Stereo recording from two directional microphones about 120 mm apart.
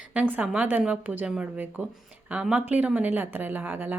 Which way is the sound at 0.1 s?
10° right (ahead or behind).